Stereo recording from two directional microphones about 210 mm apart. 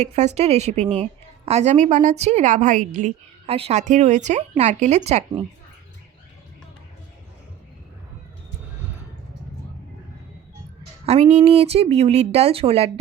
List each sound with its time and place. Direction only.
0.3 s a woman's voice: 30° right (ahead or behind)
11.0 s speech: 30° right (ahead or behind)